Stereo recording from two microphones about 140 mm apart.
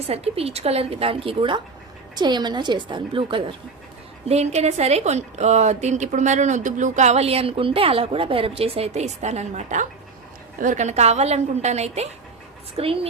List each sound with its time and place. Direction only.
0.1 s a woman's voice: 45° right (ahead or behind)
4.3 s a woman's voice: 50° right (ahead or behind)